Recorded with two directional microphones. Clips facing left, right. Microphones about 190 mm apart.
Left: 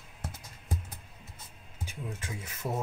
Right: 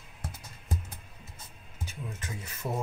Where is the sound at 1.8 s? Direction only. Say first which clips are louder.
Left 1 dB; 10° left (ahead or behind).